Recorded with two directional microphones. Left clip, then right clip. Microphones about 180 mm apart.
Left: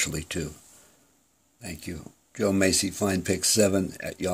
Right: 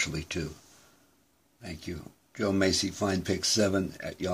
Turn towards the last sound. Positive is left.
turn(degrees=30)  # may be behind; listen again after turning